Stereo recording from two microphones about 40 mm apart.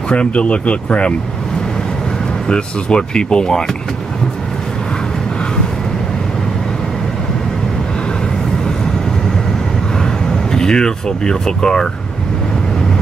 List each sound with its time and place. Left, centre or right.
0.1 s speech: left
2.4 s speech: left
10.0 s speech: centre